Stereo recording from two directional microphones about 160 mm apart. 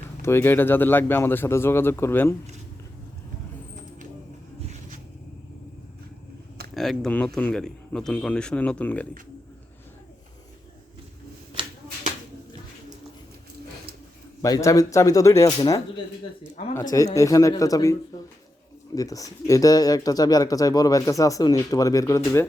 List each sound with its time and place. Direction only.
0.2 s speech: 15° left (ahead or behind)
6.7 s speech: centre (ahead or behind)
11.6 s a sound: 35° right (ahead or behind)
14.4 s speech: 20° left (ahead or behind)
17.2 s speech: 20° left (ahead or behind)